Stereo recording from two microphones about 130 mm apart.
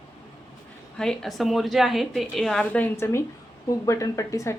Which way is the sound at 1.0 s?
5° left (ahead or behind).